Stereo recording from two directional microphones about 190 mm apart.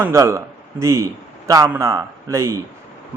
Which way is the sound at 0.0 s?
15° right (ahead or behind).